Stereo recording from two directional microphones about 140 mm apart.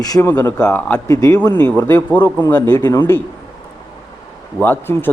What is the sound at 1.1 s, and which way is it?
Speech, 25° left (ahead or behind).